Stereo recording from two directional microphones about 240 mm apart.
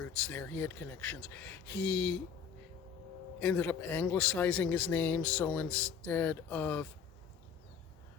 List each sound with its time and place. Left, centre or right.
0.1 s speech: centre
3.4 s speech: centre